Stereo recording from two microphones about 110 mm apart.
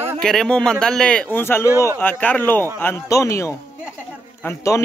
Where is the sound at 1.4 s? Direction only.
20° left (ahead or behind).